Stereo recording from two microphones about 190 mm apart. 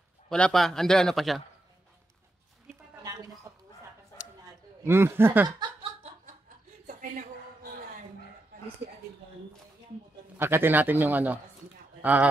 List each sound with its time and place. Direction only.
0.3 s a man's voice: 5° left (ahead or behind)
4.8 s a man's voice: 10° right (ahead or behind)
6.9 s a sound: 45° right (ahead or behind)
10.3 s a man's voice: 10° right (ahead or behind)